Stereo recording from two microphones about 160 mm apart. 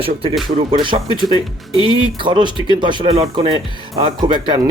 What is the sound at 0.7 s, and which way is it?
Speech, 30° right (ahead or behind).